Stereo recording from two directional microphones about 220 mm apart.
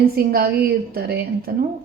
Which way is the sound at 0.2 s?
45° right (ahead or behind).